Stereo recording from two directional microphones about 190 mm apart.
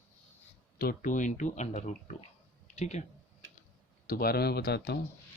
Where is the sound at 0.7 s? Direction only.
50° left (ahead or behind).